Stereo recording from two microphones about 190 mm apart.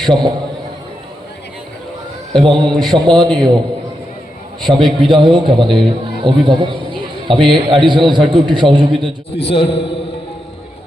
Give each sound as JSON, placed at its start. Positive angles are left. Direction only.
{"t": 0.0, "sound": "a man's voice", "side_deg": -20}
{"t": 2.4, "sound": "a man's voice", "side_deg": -25}
{"t": 4.6, "sound": "a man's voice", "side_deg": -25}
{"t": 9.5, "sound": "a man's voice", "side_deg": 30}